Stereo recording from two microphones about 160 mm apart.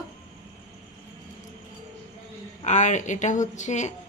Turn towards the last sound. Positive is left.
turn(degrees=45)  # may be behind; listen again after turning